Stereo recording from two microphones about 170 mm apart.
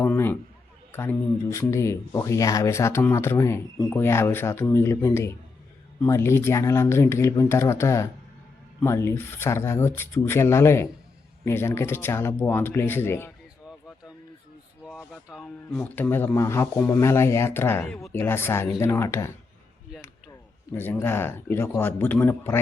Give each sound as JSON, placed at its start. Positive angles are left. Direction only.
{"t": 0.0, "sound": "a man's voice", "side_deg": 10}
{"t": 14.8, "sound": "speech", "side_deg": -5}
{"t": 20.7, "sound": "speech", "side_deg": 10}